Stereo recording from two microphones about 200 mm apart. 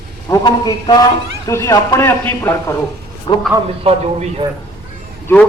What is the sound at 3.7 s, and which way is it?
Speech, 30° right (ahead or behind).